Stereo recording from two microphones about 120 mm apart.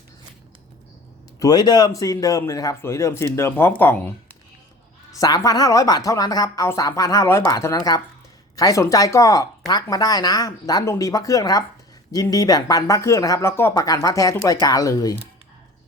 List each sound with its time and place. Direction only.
1.4 s speech: 35° left (ahead or behind); by 4.4 s 15° left (ahead or behind)
5.2 s speech: 30° left (ahead or behind)